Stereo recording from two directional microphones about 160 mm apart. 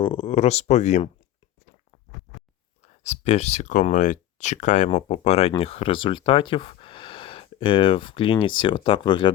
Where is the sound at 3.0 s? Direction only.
45° left (ahead or behind).